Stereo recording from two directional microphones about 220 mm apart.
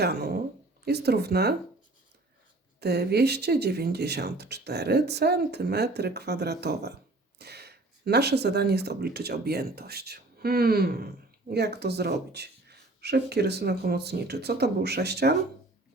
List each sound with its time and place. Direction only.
0.0 s speech: 45° right (ahead or behind)
2.8 s speech: 50° right (ahead or behind)